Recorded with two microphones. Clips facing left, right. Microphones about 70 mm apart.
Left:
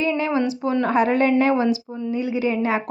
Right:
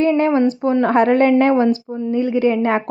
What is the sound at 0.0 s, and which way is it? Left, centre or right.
A woman's voice, right.